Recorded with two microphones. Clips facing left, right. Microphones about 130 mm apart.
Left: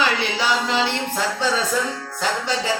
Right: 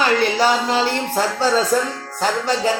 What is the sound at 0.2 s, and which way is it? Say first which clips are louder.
Music: right 5 dB; 45° right (ahead or behind).